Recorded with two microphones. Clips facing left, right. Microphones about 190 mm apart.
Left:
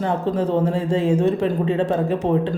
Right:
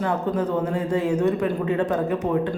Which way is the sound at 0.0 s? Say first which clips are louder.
Left 2 dB; 30° left (ahead or behind).